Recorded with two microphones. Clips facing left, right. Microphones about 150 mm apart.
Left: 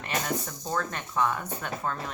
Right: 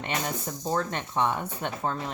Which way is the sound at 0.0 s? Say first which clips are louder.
Even; 25° right (ahead or behind).